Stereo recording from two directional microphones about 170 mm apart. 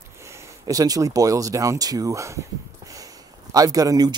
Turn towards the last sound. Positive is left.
turn(degrees=-20)  # may be behind; listen again after turning